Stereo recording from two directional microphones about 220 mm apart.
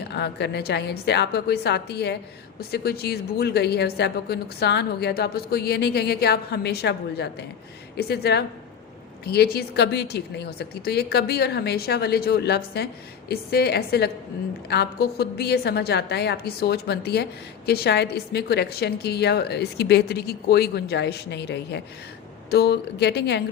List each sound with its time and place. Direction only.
0.1 s speech: 50° left (ahead or behind)